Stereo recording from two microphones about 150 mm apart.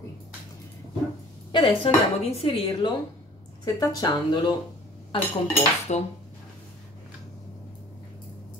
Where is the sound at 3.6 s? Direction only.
25° left (ahead or behind).